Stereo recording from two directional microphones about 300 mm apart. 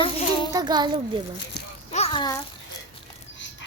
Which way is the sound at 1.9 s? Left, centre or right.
Centre.